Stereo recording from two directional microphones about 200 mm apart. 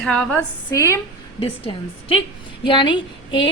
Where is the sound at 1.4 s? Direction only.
25° left (ahead or behind).